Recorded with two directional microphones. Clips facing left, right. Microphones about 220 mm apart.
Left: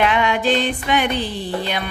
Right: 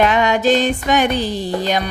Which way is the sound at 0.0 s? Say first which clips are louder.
Right 3 dB; 40° right (ahead or behind).